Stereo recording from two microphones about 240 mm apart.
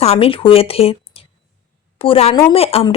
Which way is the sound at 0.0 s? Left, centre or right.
Left.